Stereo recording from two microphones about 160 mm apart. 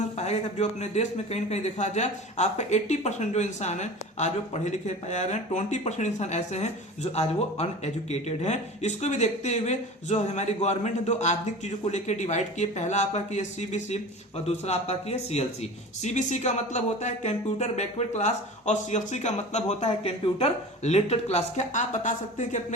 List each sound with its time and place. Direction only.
0.2 s speech: 45° left (ahead or behind)